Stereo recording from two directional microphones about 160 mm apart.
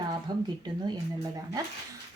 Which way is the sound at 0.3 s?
25° right (ahead or behind).